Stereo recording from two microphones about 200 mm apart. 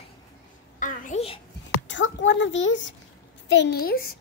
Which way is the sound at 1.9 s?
65° left (ahead or behind).